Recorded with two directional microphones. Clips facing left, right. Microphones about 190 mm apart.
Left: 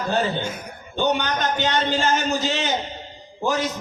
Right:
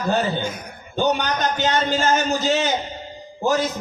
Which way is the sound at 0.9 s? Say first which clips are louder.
Right 1 dB; 40° right (ahead or behind).